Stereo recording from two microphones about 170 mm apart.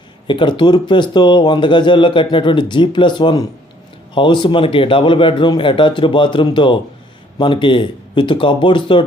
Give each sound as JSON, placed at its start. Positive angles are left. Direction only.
{"t": 0.3, "sound": "speech", "side_deg": 30}